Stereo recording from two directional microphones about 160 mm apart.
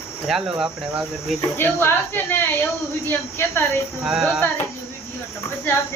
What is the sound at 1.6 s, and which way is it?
A woman's voice, 15° left (ahead or behind).